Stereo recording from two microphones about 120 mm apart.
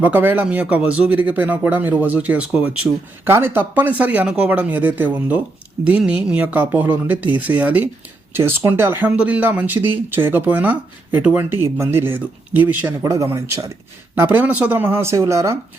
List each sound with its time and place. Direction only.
0.0 s speech: 15° right (ahead or behind)